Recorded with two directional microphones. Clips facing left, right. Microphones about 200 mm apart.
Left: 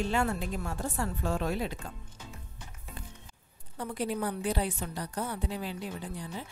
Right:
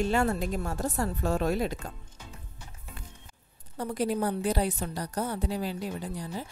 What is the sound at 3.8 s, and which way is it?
A woman's voice, 40° right (ahead or behind).